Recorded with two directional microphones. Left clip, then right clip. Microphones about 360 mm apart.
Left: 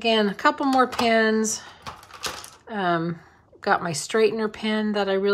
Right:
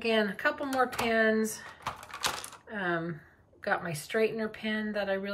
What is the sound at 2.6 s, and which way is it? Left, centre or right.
Speech, centre.